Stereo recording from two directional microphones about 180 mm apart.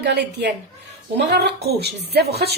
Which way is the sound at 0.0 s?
65° right (ahead or behind).